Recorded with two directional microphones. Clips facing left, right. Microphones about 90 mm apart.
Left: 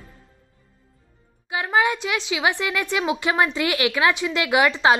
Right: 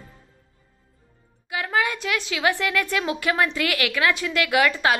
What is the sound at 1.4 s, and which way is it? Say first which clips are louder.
A woman's voice: left 3 dB; 20° left (ahead or behind).